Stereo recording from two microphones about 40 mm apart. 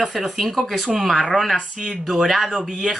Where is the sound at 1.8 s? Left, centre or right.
Centre.